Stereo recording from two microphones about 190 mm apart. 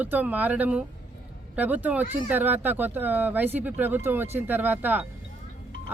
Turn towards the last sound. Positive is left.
turn(degrees=-10)  # may be behind; listen again after turning